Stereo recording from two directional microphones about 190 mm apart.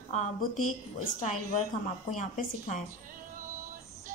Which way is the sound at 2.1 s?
45° left (ahead or behind).